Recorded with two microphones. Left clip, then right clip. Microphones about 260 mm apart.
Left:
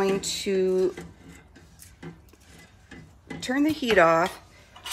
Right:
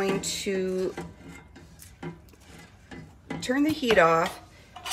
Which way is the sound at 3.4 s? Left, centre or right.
Left.